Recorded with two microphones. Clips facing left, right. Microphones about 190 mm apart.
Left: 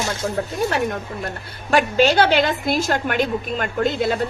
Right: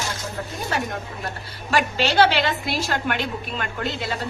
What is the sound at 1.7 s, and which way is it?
A woman's voice, 50° left (ahead or behind).